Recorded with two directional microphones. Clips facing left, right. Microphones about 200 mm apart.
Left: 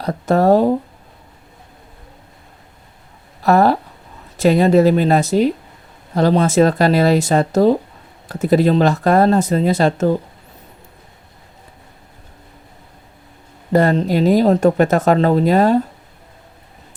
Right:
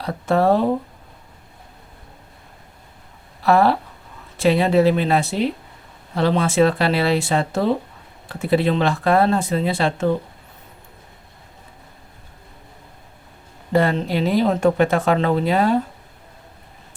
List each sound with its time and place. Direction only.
0.0 s speech: 40° left (ahead or behind)
3.4 s speech: 45° left (ahead or behind)
13.7 s speech: 40° left (ahead or behind)